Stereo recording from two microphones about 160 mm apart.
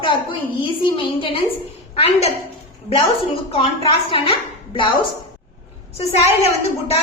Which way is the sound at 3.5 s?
35° left (ahead or behind).